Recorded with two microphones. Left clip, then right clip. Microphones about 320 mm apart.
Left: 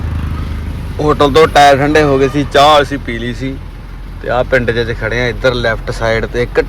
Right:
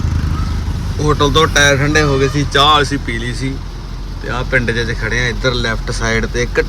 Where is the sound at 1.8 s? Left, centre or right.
Centre.